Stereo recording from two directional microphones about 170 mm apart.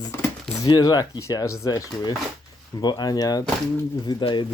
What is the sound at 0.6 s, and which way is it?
Speech, 25° left (ahead or behind).